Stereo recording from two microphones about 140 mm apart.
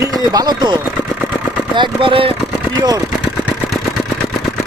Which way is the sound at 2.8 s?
30° right (ahead or behind).